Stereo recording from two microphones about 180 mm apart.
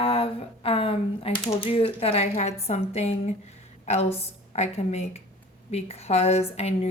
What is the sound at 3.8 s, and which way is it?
A woman's voice, 35° left (ahead or behind).